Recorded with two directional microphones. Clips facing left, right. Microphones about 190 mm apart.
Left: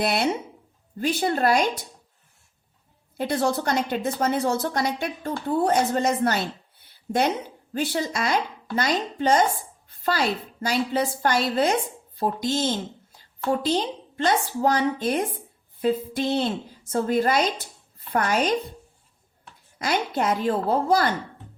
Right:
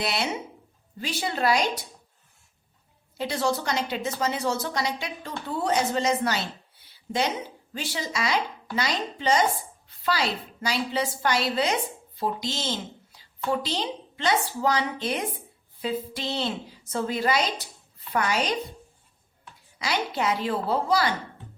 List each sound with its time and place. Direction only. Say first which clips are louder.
0.0 s a woman's voice: left 5 dB; 50° left (ahead or behind)
3.2 s a woman's voice: left 3 dB; 50° left (ahead or behind)
19.8 s a woman's voice: left 3 dB; 50° left (ahead or behind)